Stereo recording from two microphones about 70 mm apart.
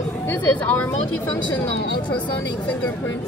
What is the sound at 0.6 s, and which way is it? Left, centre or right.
Speech, left.